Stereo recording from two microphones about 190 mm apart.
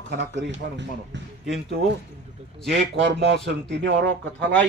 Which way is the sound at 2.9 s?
65° right (ahead or behind).